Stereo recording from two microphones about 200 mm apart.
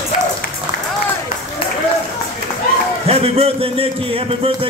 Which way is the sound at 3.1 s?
30° right (ahead or behind).